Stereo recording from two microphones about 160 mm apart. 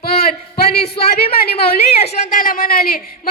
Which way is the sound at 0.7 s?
85° left.